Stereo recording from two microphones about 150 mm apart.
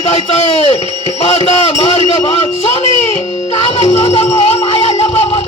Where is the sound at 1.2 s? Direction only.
40° left (ahead or behind).